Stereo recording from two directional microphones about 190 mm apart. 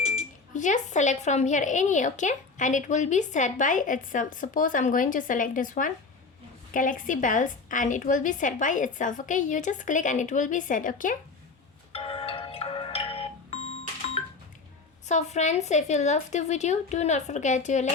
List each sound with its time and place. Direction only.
0.5 s a woman's voice: 40° left (ahead or behind)
11.9 s music: 30° left (ahead or behind)
15.0 s a woman's voice: 40° left (ahead or behind)